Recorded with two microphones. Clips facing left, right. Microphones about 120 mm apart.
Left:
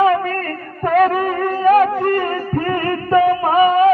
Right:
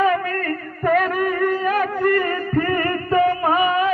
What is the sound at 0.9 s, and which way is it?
Music, 35° left (ahead or behind).